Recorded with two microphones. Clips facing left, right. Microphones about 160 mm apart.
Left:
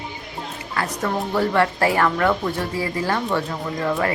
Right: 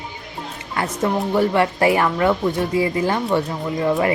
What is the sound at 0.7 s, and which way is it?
Speech, 25° right (ahead or behind).